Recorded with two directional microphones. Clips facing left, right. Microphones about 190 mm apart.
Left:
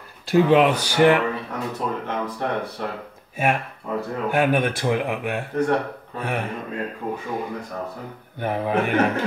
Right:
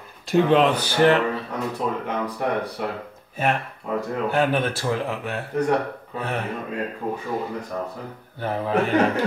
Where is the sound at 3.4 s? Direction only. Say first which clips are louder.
Left 1 dB; 10° left (ahead or behind).